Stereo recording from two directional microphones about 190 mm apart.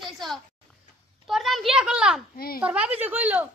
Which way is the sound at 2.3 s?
50° left (ahead or behind).